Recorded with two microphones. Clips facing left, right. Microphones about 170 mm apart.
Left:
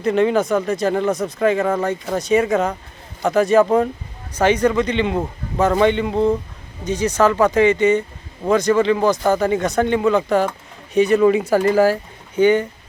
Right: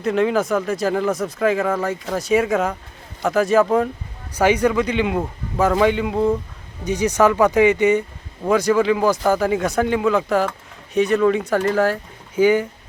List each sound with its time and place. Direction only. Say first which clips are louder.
0.0 s speech: left 2 dB; centre (ahead or behind)
6.8 s speech: even; 15° right (ahead or behind); by 11.9 s 5° left (ahead or behind)
12.4 s speech: left 1 dB; 5° right (ahead or behind)